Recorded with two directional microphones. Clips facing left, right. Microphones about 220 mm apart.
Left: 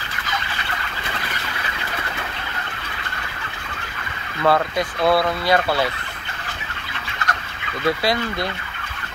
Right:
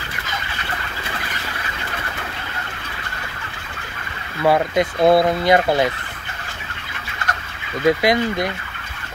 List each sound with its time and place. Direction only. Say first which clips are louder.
4.4 s speech: right 2 dB; 15° right (ahead or behind)
7.8 s speech: right 5 dB; 15° right (ahead or behind)